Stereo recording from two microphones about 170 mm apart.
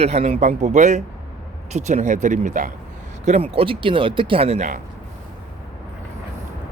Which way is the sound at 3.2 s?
40° right (ahead or behind).